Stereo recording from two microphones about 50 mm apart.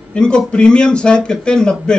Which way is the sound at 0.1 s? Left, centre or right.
Centre.